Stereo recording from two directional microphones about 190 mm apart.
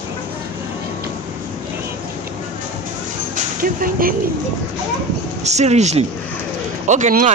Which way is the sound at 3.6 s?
50° right (ahead or behind).